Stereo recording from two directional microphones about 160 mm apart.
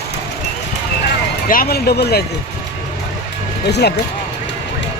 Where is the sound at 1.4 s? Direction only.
65° left (ahead or behind); by 2.2 s 85° left.